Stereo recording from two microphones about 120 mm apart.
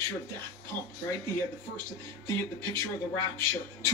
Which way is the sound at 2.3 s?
25° left (ahead or behind).